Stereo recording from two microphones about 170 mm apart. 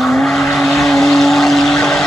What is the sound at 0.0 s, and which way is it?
Vehicle, centre (ahead or behind).